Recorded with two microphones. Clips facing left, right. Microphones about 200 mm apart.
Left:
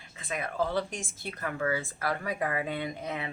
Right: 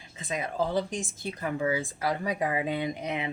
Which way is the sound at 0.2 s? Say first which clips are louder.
Right 2 dB; 20° right (ahead or behind).